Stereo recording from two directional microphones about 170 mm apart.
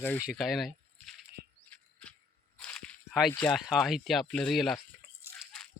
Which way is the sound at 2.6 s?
5° left (ahead or behind).